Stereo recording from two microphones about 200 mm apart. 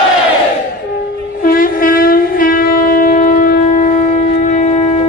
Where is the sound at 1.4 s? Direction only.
45° left (ahead or behind).